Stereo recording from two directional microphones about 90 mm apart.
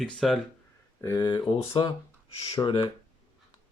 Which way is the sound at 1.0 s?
35° left (ahead or behind).